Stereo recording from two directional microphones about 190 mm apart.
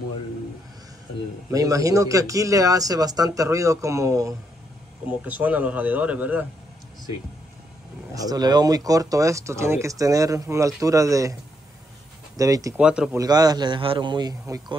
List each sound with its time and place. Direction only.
1.5 s speech: 15° right (ahead or behind)
8.1 s speech: 20° right (ahead or behind)
12.4 s speech: 15° right (ahead or behind)
12.7 s speech: 5° right (ahead or behind)
13.2 s a man's voice: 20° right (ahead or behind)